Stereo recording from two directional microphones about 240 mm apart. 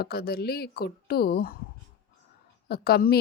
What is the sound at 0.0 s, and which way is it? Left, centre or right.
A woman's voice, left.